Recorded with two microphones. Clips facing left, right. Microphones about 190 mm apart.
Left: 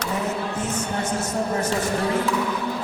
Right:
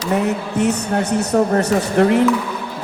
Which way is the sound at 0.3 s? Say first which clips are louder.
Right 8 dB; 70° right (ahead or behind).